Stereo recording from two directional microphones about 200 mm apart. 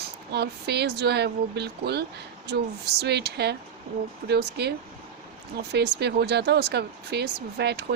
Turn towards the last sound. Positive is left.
turn(degrees=-55)  # may be behind; listen again after turning